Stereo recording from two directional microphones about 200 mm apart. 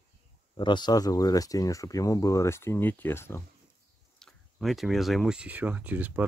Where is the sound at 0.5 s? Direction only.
20° left (ahead or behind).